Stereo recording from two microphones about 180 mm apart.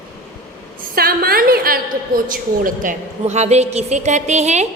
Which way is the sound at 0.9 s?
55° right (ahead or behind).